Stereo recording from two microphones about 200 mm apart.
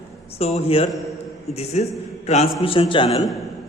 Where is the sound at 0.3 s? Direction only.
30° left (ahead or behind).